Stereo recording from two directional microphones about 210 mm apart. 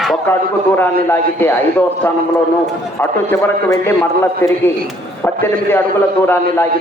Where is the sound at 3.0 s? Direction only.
10° left (ahead or behind).